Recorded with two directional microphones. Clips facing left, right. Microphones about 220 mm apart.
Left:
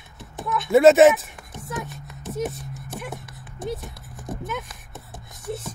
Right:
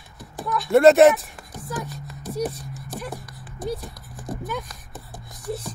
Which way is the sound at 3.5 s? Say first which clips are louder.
Right 1 dB; 20° left (ahead or behind).